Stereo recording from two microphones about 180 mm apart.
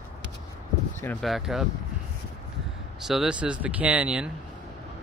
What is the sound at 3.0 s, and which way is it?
Speech, centre (ahead or behind).